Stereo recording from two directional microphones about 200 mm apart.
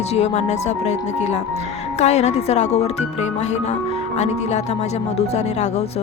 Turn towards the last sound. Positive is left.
turn(degrees=35)  # may be behind; listen again after turning